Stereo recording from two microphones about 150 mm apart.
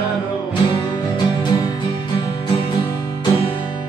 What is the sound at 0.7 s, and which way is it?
Music, 30° left (ahead or behind).